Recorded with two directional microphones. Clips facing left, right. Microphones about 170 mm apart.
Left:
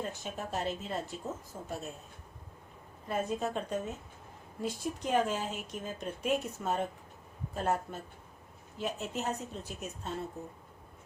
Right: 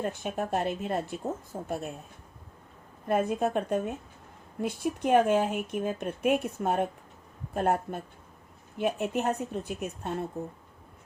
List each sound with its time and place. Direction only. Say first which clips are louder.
0.1 s speech: right 7 dB; 60° right (ahead or behind)
3.1 s speech: right 7 dB; 60° right (ahead or behind)